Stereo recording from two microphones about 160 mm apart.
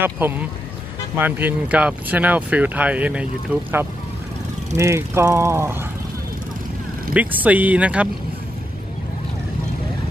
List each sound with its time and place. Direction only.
0.0 s speech: 10° right (ahead or behind)
4.7 s speech: 15° right (ahead or behind)
7.2 s speech: 10° right (ahead or behind)